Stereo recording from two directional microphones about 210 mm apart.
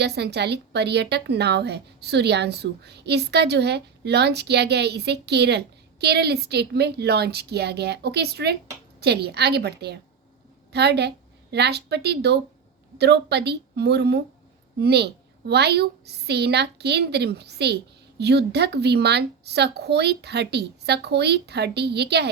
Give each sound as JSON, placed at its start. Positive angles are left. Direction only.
{"t": 0.0, "sound": "a woman's voice", "side_deg": -50}